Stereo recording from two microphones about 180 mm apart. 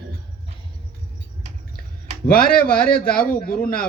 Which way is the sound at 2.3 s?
55° left (ahead or behind).